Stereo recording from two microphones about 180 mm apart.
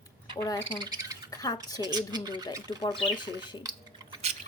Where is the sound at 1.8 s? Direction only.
20° right (ahead or behind).